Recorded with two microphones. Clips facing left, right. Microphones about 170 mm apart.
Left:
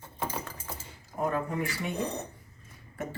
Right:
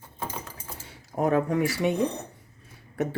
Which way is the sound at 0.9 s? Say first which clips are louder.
Right 7 dB; 80° right.